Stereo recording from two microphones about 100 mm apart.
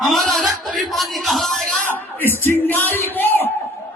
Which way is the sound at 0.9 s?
Centre (ahead or behind).